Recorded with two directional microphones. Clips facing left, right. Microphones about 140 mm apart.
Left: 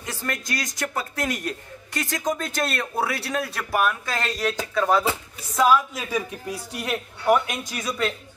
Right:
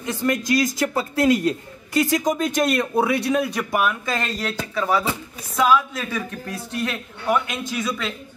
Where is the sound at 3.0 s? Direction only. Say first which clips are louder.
Right 6 dB; 5° right (ahead or behind); by 7.4 s 10° left (ahead or behind).